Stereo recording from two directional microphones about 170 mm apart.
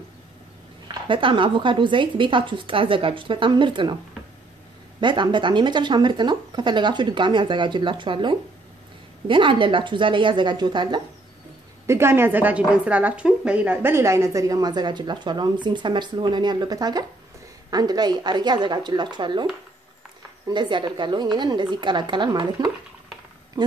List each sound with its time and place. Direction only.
1.0 s a woman's voice: 30° right (ahead or behind)
5.0 s a woman's voice: 25° right (ahead or behind)
11.8 s a woman's voice: 15° right (ahead or behind)
20.4 s a woman's voice: 25° right (ahead or behind)